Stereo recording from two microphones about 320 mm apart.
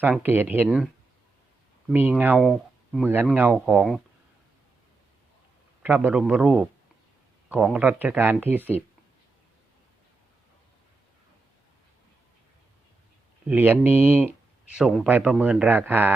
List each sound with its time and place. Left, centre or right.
0.0 s speech: centre
1.9 s speech: centre
5.8 s speech: centre
13.5 s speech: centre